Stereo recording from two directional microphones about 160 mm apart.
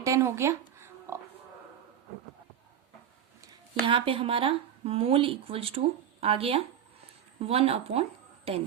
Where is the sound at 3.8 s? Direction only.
35° right (ahead or behind).